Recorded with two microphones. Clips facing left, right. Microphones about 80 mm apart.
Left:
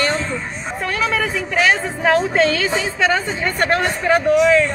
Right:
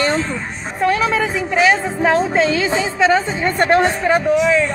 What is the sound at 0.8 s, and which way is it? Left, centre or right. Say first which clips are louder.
A woman's voice: right 5 dB; right.